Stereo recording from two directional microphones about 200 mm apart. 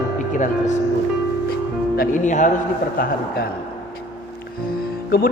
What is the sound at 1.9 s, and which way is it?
A man's voice, 45° left (ahead or behind).